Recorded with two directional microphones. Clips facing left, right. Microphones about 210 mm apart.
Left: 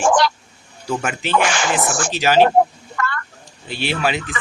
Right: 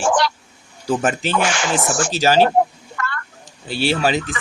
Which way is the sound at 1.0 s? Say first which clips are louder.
Left 2 dB; 45° right (ahead or behind).